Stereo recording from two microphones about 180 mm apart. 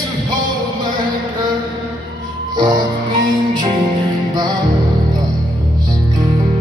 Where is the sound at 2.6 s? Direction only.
25° right (ahead or behind).